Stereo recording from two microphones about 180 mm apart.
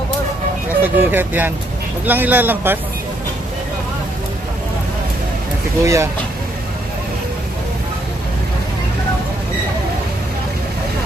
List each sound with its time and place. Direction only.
0.8 s speech: 10° right (ahead or behind)
5.8 s speech: 15° right (ahead or behind)